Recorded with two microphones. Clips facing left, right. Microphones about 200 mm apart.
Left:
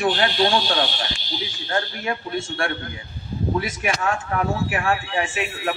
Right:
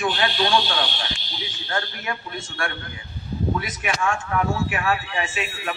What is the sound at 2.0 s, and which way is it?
Speech, 30° left (ahead or behind).